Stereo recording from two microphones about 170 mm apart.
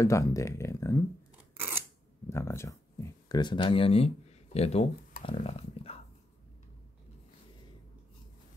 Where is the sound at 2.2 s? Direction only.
15° left (ahead or behind); by 4.8 s 40° left (ahead or behind).